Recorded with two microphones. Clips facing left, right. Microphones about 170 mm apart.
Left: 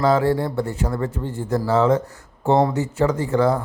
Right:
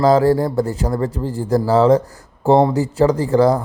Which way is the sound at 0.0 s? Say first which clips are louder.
Right 5 dB; 40° right (ahead or behind).